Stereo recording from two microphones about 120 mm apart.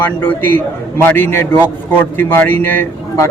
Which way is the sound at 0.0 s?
15° left (ahead or behind).